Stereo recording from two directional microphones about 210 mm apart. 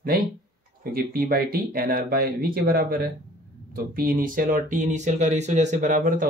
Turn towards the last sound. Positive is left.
turn(degrees=-40)  # may be behind; listen again after turning